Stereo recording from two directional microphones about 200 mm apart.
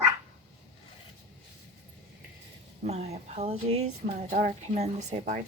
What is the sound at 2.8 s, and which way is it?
A woman's voice, 35° right (ahead or behind).